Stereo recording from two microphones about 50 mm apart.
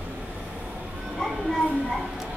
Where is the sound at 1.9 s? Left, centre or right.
Centre.